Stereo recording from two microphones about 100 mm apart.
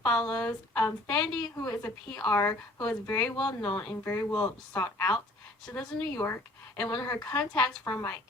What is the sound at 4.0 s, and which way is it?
Speech, 25° left (ahead or behind).